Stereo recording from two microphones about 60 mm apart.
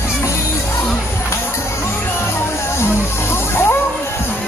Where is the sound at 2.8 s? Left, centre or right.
Left.